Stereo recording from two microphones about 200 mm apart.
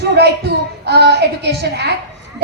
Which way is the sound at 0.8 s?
55° right (ahead or behind).